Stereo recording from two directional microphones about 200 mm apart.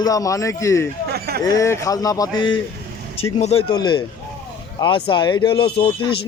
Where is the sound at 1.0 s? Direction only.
50° right (ahead or behind).